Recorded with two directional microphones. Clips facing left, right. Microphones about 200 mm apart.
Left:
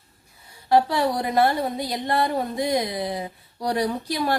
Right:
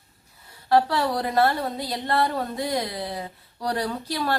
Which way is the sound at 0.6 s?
15° left (ahead or behind).